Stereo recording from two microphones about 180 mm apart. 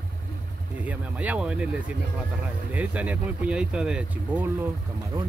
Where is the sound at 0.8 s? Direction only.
10° right (ahead or behind).